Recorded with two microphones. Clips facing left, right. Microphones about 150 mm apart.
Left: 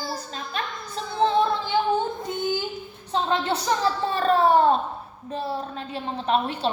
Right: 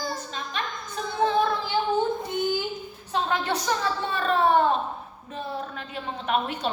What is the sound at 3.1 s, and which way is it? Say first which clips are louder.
A woman's voice: left 2 dB; 30° left (ahead or behind).